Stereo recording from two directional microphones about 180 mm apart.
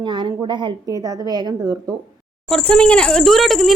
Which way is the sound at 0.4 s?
25° right (ahead or behind).